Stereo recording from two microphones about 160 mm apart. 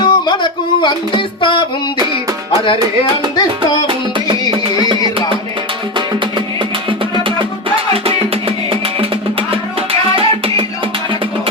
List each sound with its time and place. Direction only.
0.0 s music: 30° left (ahead or behind)
4.5 s music: 30° right (ahead or behind)